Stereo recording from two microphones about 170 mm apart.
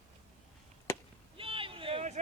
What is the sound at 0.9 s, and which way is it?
Chop, 15° left (ahead or behind).